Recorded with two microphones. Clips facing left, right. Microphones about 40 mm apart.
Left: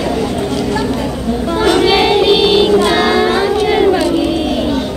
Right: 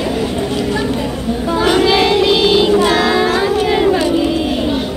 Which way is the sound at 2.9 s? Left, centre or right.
Centre.